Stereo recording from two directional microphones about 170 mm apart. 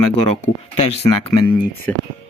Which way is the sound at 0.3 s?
35° left (ahead or behind).